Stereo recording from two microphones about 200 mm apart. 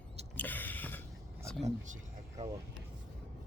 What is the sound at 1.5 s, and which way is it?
Speech, 5° left (ahead or behind).